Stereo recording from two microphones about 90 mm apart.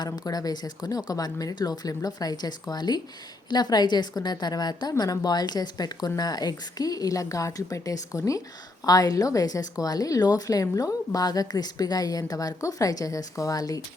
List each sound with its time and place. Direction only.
0.0 s a woman's voice: 45° left (ahead or behind)